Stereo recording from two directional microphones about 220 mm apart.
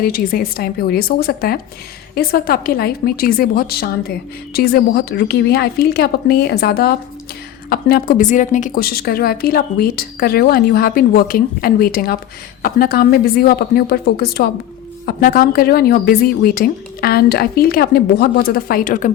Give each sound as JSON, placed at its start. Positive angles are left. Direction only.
{"t": 0.0, "sound": "a woman's voice", "side_deg": 45}